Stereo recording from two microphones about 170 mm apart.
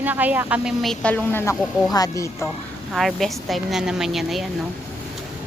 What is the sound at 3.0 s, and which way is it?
A woman's voice, centre (ahead or behind).